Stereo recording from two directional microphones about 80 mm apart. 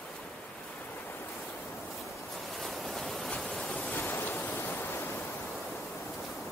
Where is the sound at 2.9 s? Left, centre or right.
Centre.